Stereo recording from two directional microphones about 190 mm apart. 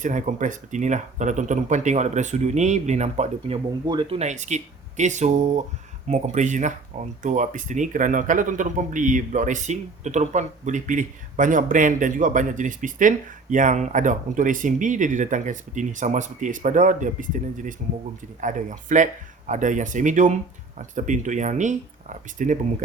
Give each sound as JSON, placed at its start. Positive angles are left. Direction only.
{"t": 0.0, "sound": "speech", "side_deg": -40}
{"t": 3.8, "sound": "speech", "side_deg": -25}